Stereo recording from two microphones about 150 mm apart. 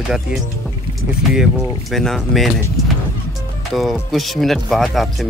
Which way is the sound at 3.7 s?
Centre (ahead or behind).